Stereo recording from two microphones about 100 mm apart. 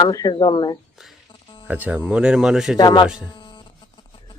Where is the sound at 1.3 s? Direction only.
60° left (ahead or behind).